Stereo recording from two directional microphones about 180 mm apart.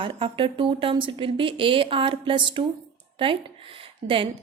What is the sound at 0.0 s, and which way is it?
Speech, 30° right (ahead or behind).